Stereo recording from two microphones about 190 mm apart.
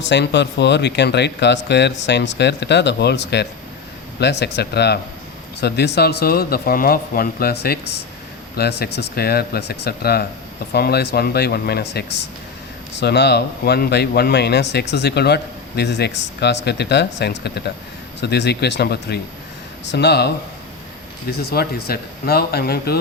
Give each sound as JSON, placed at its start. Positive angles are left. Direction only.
{"t": 0.0, "sound": "speech", "side_deg": 65}